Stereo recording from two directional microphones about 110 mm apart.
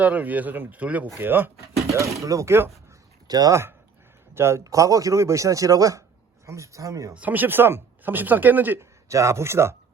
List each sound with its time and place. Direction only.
0.0 s speech: 15° right (ahead or behind)
2.1 s a man's voice: 30° right (ahead or behind)
3.2 s speech: 35° right (ahead or behind)
4.4 s a man's voice: 25° right (ahead or behind)
7.1 s speech: 15° right (ahead or behind)